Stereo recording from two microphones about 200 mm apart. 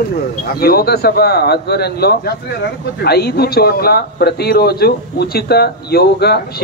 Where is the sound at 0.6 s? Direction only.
50° left (ahead or behind).